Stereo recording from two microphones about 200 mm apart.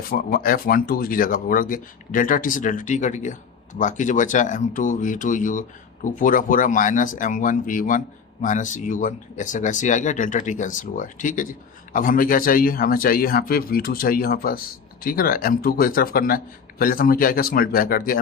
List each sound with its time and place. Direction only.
0.1 s speech: 45° left (ahead or behind)